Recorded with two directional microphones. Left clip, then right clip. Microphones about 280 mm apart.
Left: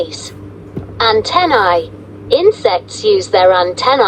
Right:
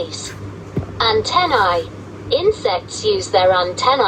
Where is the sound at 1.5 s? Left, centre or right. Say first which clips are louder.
Left 5 dB; left.